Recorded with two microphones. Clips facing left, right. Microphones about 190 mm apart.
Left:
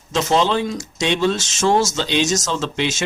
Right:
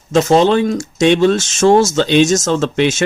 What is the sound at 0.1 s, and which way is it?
Speech, 50° right (ahead or behind).